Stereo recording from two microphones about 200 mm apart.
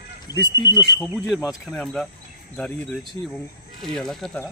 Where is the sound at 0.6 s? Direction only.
20° left (ahead or behind).